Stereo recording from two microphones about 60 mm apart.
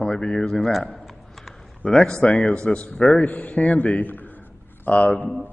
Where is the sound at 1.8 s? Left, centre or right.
Centre.